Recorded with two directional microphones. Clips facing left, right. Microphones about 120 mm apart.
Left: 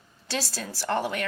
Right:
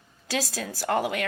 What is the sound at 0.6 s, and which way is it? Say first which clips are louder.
Speech: right 2 dB; 50° right (ahead or behind).